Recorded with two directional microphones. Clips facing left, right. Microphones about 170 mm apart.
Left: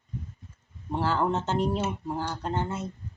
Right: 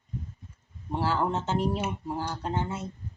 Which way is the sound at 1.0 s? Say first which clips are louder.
Left 1 dB; 10° right (ahead or behind).